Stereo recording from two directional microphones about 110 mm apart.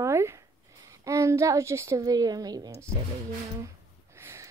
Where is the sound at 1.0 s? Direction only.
25° right (ahead or behind).